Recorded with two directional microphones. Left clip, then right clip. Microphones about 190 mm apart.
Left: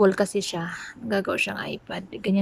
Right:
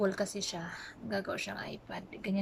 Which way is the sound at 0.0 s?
45° left (ahead or behind).